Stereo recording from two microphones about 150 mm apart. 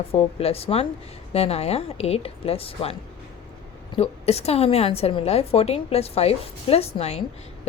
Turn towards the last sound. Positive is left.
turn(degrees=45)  # may be behind; listen again after turning